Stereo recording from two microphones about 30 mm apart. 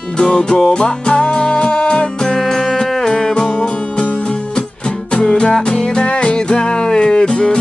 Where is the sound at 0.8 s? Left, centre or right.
Left.